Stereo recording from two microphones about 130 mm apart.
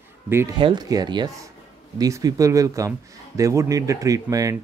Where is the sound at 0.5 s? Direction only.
35° right (ahead or behind).